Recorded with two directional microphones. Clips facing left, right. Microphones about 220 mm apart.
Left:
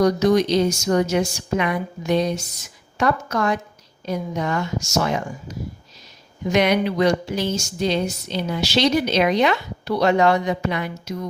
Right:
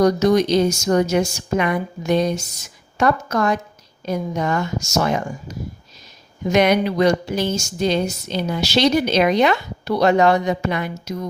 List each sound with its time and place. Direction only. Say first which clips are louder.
0.0 s speech: right 1 dB; 45° right (ahead or behind)
6.5 s speech: right 2 dB; 45° right (ahead or behind)